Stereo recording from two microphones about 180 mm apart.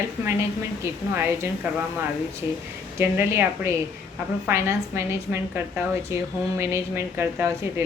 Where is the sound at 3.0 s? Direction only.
15° right (ahead or behind).